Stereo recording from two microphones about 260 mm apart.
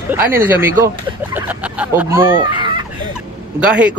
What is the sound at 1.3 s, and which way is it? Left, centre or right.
Fowl, centre.